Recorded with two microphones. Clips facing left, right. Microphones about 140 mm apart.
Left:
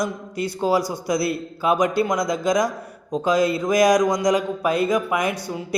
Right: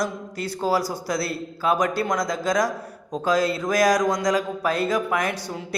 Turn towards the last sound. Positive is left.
turn(degrees=10)  # may be behind; listen again after turning